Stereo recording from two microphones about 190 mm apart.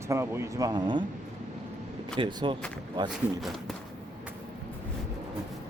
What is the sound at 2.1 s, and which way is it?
Speech, 25° right (ahead or behind).